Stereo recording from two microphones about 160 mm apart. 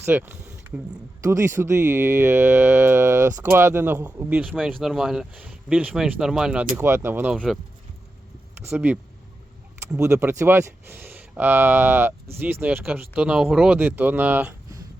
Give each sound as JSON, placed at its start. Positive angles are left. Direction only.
{"t": 0.0, "sound": "a sound", "side_deg": -10}
{"t": 1.2, "sound": "speech", "side_deg": -20}
{"t": 8.6, "sound": "speech", "side_deg": -10}
{"t": 10.0, "sound": "speech", "side_deg": -15}